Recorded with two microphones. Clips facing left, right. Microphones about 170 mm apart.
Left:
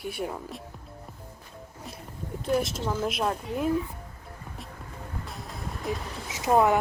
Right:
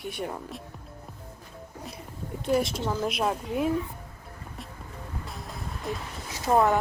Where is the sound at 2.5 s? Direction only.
Centre (ahead or behind).